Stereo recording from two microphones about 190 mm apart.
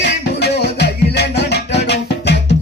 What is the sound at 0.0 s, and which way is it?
Music, 65° left (ahead or behind).